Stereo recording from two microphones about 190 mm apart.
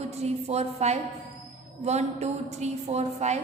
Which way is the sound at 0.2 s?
35° right (ahead or behind).